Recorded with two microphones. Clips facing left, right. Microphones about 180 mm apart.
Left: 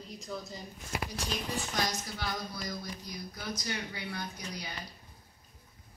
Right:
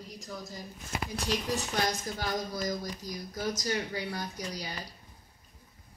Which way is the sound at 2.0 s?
45° right (ahead or behind).